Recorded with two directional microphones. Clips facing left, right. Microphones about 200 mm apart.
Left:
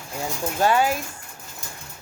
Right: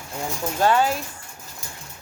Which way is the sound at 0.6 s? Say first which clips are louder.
Even; 10° left (ahead or behind).